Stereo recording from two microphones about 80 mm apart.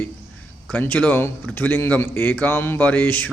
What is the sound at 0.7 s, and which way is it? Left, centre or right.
A man's voice, left.